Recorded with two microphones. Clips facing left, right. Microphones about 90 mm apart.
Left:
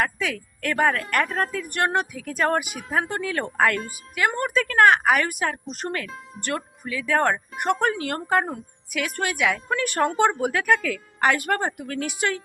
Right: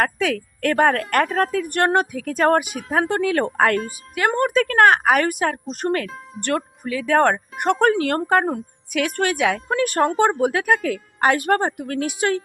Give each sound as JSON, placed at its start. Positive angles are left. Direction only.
{"t": 0.0, "sound": "speech", "side_deg": -50}
{"t": 6.4, "sound": "speech", "side_deg": 0}
{"t": 6.8, "sound": "speech", "side_deg": -50}
{"t": 9.3, "sound": "speech", "side_deg": -40}